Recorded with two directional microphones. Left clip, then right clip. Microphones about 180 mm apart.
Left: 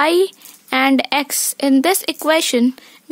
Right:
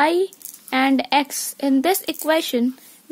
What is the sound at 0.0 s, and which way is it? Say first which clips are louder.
A woman's voice: left 3 dB; 30° left (ahead or behind).